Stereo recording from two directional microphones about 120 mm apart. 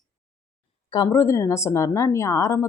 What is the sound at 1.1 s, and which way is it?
Speech, 20° left (ahead or behind).